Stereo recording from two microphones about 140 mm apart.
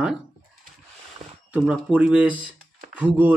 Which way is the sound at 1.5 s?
10° right (ahead or behind).